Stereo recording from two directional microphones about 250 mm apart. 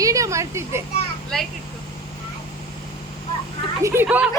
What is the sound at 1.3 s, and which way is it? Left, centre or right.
Speech, centre.